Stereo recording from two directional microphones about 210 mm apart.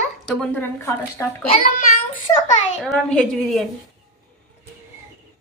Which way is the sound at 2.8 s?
Centre (ahead or behind).